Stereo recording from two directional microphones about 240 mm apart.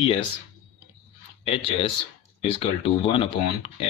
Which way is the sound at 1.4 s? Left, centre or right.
Left.